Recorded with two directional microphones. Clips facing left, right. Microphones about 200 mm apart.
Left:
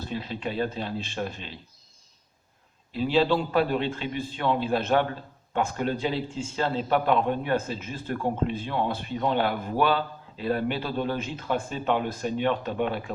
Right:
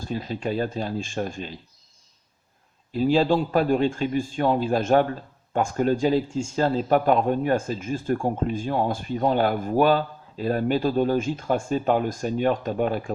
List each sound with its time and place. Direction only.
0.0 s speech: 45° right (ahead or behind)
2.9 s speech: 45° right (ahead or behind)